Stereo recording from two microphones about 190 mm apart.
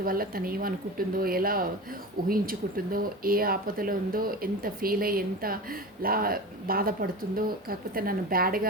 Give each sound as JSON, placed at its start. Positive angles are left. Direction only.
{"t": 0.0, "sound": "speech", "side_deg": -50}